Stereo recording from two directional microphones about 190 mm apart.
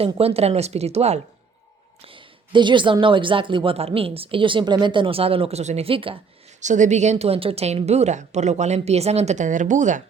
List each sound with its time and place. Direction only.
0.0 s a woman's voice: 30° right (ahead or behind)
6.6 s a woman's voice: 40° right (ahead or behind)